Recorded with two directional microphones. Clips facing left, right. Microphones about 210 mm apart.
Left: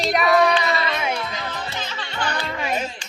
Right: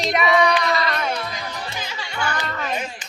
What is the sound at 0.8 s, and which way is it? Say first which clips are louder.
Music: even; 10° left (ahead or behind).